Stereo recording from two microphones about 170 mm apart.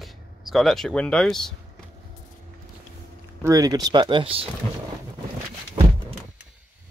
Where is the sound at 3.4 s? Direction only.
20° right (ahead or behind).